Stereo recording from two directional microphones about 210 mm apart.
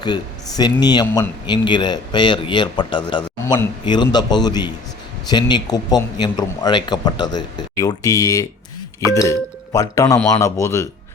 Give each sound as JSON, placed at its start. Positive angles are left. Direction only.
{"t": 0.0, "sound": "a man's voice", "side_deg": 20}